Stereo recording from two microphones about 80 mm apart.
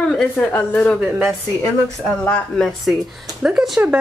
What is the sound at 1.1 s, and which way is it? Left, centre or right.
Speech, centre.